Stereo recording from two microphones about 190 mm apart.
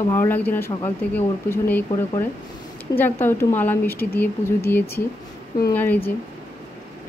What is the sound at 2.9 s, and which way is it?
Speech, 10° left (ahead or behind).